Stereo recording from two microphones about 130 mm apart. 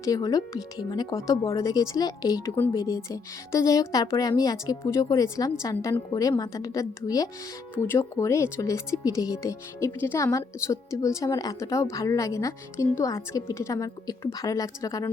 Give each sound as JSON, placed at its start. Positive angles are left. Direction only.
{"t": 0.0, "sound": "speech", "side_deg": 30}